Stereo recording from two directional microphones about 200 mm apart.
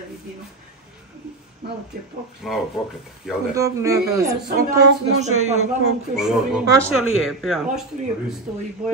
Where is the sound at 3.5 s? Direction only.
15° right (ahead or behind).